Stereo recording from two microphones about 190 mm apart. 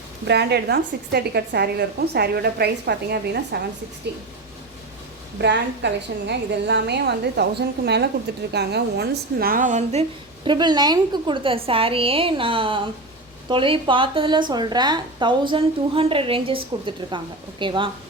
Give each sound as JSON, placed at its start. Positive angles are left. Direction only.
{"t": 0.3, "sound": "a woman's voice", "side_deg": -60}
{"t": 5.4, "sound": "a woman's voice", "side_deg": -65}